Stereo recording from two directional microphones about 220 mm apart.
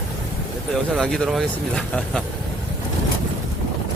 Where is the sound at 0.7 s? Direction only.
Centre (ahead or behind).